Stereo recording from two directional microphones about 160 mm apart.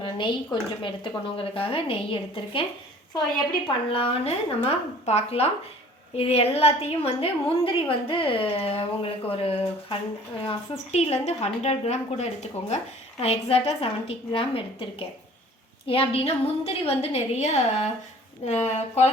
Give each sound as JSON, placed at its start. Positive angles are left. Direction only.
{"t": 0.0, "sound": "a woman's voice", "side_deg": 30}
{"t": 3.8, "sound": "a woman's voice", "side_deg": 35}